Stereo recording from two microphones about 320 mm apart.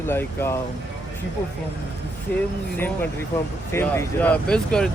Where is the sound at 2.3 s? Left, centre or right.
Centre.